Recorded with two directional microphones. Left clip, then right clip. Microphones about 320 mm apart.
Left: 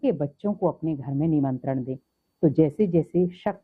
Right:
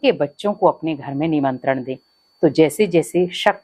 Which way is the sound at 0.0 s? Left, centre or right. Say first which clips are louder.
Right 8 dB; centre.